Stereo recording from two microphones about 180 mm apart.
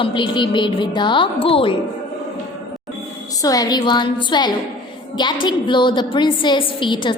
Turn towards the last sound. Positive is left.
turn(degrees=25)  # may be behind; listen again after turning